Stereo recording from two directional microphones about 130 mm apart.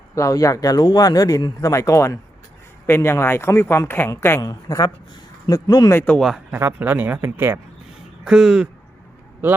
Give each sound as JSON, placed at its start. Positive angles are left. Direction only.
{"t": 0.1, "sound": "speech", "side_deg": 25}
{"t": 5.9, "sound": "speech", "side_deg": 20}
{"t": 6.1, "sound": "speech", "side_deg": 0}
{"t": 6.5, "sound": "speech", "side_deg": -15}
{"t": 8.2, "sound": "speech", "side_deg": -5}